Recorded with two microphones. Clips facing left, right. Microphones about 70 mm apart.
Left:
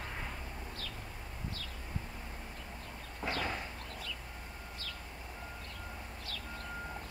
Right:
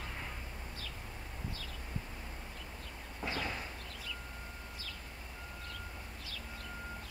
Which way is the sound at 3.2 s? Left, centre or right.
Centre.